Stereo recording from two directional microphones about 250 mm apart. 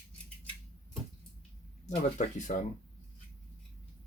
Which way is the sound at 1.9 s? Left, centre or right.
Left.